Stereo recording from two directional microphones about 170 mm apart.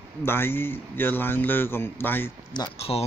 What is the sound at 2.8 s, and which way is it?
Speech, 35° left (ahead or behind).